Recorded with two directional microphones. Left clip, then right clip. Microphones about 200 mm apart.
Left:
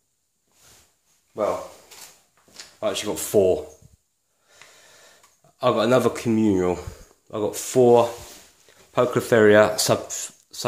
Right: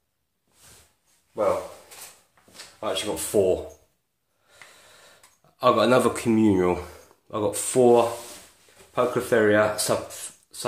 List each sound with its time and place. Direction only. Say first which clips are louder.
2.5 s speech: left 2 dB; 45° left (ahead or behind); by 3.6 s 30° left (ahead or behind)
4.5 s a sound: even; 20° left (ahead or behind)
8.9 s speech: left 3 dB; 45° left (ahead or behind)